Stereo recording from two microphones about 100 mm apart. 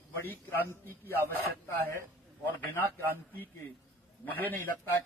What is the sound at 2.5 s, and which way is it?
A man's voice, 20° left (ahead or behind).